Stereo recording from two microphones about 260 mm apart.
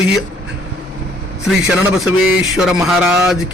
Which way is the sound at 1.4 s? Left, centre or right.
Centre.